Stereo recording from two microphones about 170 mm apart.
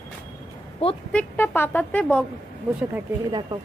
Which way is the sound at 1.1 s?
10° left (ahead or behind).